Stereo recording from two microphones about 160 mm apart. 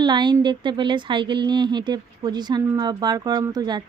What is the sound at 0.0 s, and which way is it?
Speech, 25° right (ahead or behind).